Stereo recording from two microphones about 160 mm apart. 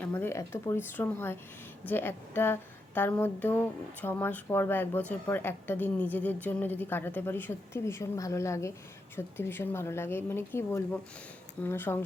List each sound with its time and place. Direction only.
0.0 s speech: 10° left (ahead or behind)